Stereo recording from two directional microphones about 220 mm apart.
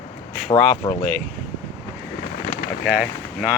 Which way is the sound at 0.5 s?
25° left (ahead or behind).